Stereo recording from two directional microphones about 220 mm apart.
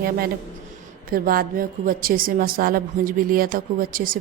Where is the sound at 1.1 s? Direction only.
40° right (ahead or behind).